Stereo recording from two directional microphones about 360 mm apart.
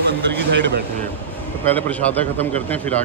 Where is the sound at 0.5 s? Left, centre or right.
Right.